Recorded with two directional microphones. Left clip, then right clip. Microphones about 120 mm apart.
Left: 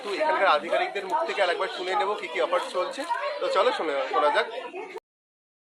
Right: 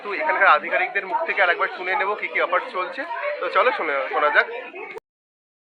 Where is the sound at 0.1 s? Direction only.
25° left (ahead or behind).